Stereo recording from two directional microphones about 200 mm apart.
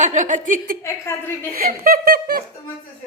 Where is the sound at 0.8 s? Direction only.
10° left (ahead or behind).